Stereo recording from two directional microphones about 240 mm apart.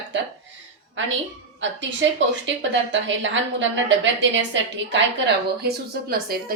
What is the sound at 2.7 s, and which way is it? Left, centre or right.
A woman's voice, right.